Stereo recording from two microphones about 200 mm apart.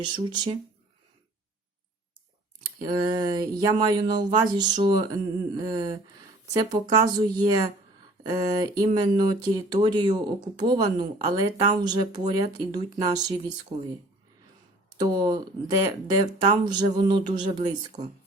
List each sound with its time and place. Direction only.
0.0 s speech: 20° right (ahead or behind)
2.8 s speech: 20° right (ahead or behind)
14.9 s speech: 20° right (ahead or behind)